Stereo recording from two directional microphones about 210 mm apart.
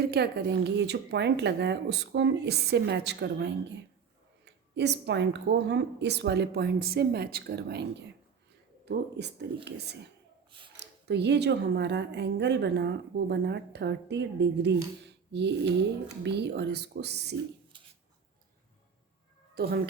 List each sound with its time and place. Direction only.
0.0 s a woman's voice: 50° right (ahead or behind)
17.7 s writing: 25° right (ahead or behind)
19.5 s a woman's voice: 45° right (ahead or behind)